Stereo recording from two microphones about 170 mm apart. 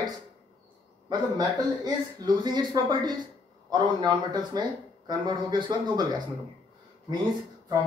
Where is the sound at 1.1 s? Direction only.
25° right (ahead or behind).